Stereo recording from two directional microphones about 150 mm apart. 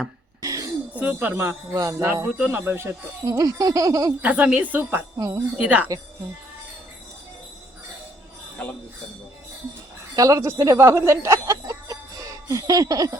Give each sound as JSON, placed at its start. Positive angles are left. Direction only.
{"t": 0.4, "sound": "a sound", "side_deg": -20}
{"t": 0.9, "sound": "speech", "side_deg": -10}
{"t": 4.2, "sound": "a woman's voice", "side_deg": -10}
{"t": 5.5, "sound": "a woman's voice", "side_deg": -10}
{"t": 10.2, "sound": "speech", "side_deg": -20}